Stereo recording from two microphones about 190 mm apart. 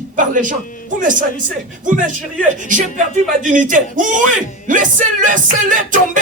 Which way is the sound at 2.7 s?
45° right (ahead or behind).